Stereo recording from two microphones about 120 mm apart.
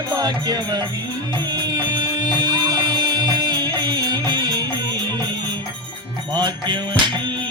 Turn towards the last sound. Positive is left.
turn(degrees=-40)  # may be behind; listen again after turning